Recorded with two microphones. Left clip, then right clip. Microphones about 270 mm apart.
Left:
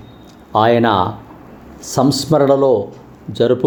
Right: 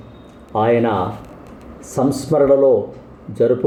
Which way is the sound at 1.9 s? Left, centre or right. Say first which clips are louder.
Left 3 dB; centre.